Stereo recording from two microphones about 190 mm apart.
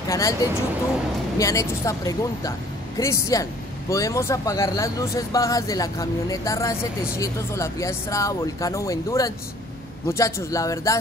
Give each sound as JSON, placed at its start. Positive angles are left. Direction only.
{"t": 0.1, "sound": "speech", "side_deg": 15}